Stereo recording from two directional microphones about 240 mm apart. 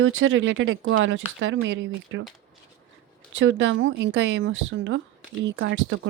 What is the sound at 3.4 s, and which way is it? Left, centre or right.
Speech, right.